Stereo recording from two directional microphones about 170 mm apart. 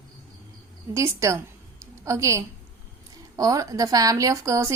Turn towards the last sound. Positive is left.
turn(degrees=-20)  # may be behind; listen again after turning